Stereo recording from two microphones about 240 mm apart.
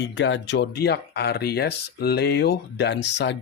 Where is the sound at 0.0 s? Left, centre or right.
Left.